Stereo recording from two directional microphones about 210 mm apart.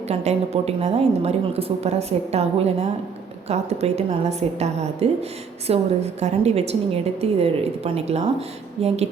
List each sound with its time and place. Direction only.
0.1 s a woman's voice: 30° right (ahead or behind)